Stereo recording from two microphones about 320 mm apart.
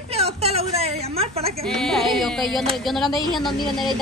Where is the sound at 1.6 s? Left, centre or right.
Centre.